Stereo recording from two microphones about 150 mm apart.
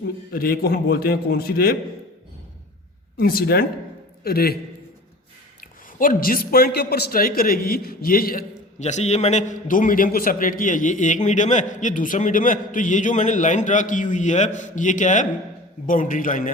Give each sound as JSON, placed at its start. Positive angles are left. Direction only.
{"t": 0.3, "sound": "a man's voice", "side_deg": 90}
{"t": 3.2, "sound": "a man's voice", "side_deg": 85}
{"t": 5.5, "sound": "a man's voice", "side_deg": 70}
{"t": 8.8, "sound": "a man's voice", "side_deg": 50}